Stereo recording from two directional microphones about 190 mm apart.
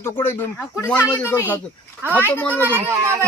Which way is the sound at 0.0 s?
10° left (ahead or behind).